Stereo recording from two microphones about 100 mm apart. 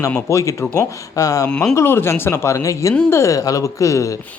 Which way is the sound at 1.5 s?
5° left (ahead or behind).